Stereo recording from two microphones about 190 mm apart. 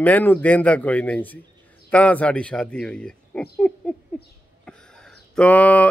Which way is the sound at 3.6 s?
5° left (ahead or behind).